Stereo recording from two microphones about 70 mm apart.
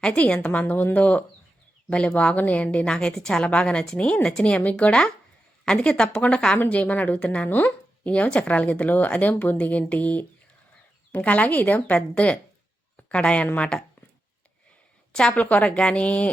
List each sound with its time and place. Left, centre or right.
0.0 s a woman's voice: centre
15.1 s a woman's voice: centre